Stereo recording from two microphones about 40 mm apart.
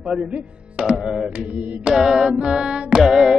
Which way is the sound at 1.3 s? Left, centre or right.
Right.